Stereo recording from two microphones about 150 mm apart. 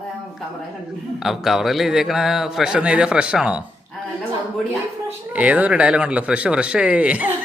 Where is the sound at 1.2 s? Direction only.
Centre (ahead or behind).